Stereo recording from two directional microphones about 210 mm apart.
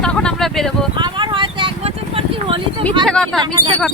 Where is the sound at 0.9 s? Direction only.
20° right (ahead or behind).